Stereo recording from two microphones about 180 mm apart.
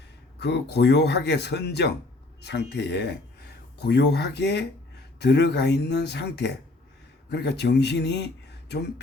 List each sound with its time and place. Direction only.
0.3 s speech: 70° left (ahead or behind)